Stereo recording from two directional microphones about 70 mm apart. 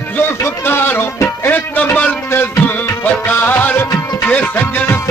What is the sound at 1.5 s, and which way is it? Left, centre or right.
Speech, left.